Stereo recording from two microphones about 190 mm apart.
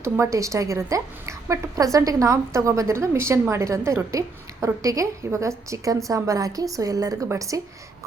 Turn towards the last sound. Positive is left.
turn(degrees=-15)  # may be behind; listen again after turning